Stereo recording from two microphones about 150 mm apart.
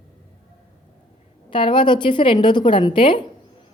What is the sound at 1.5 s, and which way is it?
A woman's voice, 35° left (ahead or behind).